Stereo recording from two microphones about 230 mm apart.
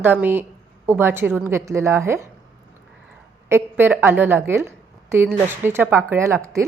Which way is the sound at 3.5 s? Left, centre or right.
Centre.